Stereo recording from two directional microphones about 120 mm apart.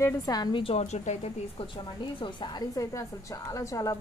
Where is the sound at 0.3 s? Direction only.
40° left (ahead or behind).